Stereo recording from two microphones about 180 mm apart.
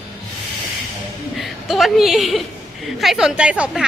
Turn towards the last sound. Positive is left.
turn(degrees=-5)  # may be behind; listen again after turning